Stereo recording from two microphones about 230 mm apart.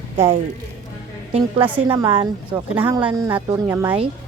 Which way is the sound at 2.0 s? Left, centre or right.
Centre.